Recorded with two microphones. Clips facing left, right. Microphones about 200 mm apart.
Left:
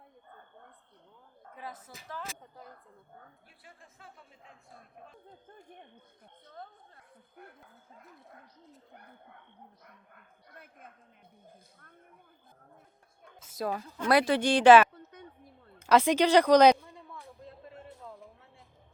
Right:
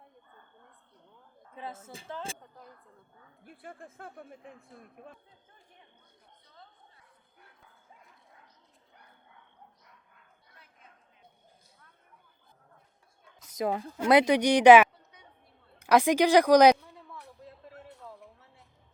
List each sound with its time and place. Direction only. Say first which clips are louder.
1.5 s a woman's voice: right 3 dB; 25° right (ahead or behind)
3.4 s a woman's voice: right 10 dB; 55° right (ahead or behind)
5.5 s speech: left 10 dB; 50° left (ahead or behind)
6.5 s chatter: left 9 dB; 55° left (ahead or behind)
8.9 s speech: left 3 dB; 55° left (ahead or behind)
9.8 s bow-wow: left 5 dB; 55° left (ahead or behind)
13.6 s a woman's voice: right 3 dB; 20° right (ahead or behind); by 17.2 s 5° right (ahead or behind)
17.4 s a sound: left 1 dB; 5° right (ahead or behind)